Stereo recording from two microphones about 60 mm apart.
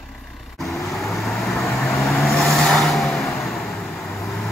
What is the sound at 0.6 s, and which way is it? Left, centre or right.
Vehicle, centre.